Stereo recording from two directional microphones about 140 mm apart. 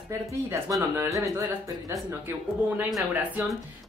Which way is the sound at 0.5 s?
20° right (ahead or behind).